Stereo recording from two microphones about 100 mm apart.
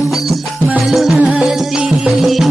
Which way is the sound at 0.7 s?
Centre (ahead or behind).